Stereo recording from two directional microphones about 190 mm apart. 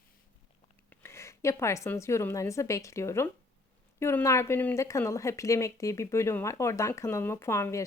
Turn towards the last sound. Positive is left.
turn(degrees=15)  # may be behind; listen again after turning